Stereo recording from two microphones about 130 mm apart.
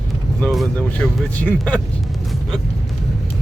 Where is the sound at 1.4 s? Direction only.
10° left (ahead or behind).